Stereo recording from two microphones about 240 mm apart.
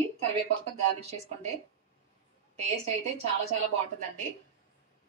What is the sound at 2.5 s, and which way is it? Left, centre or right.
Speech, right.